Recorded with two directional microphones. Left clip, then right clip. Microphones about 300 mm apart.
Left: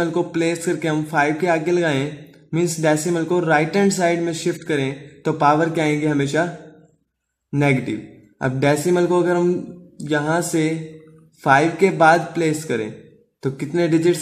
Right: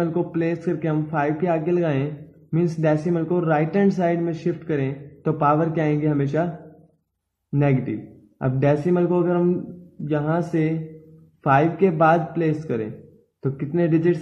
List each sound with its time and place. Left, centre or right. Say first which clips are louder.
0.0 s speech: left 3 dB; centre
8.4 s speech: left 2 dB; centre